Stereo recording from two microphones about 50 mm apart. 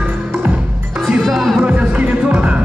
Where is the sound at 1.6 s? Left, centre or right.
Right.